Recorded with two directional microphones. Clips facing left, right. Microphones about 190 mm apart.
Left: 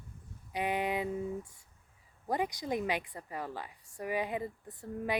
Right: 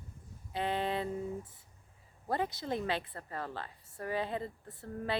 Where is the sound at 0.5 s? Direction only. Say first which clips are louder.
Left 1 dB; 15° left (ahead or behind).